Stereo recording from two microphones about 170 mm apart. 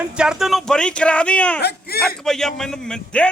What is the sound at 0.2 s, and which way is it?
A man's voice, 5° right (ahead or behind).